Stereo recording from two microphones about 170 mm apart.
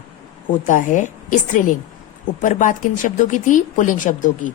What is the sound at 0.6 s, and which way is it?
Speech, 50° left (ahead or behind).